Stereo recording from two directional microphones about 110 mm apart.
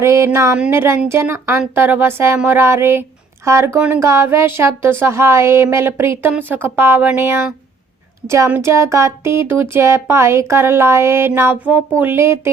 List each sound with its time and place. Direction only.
0.0 s speech: 25° right (ahead or behind)
3.8 s a woman's voice: 10° right (ahead or behind)
4.0 s a woman's voice: 25° right (ahead or behind)
8.4 s speech: 20° right (ahead or behind)